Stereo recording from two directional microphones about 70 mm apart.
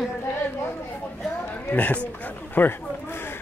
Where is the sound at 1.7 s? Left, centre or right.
Left.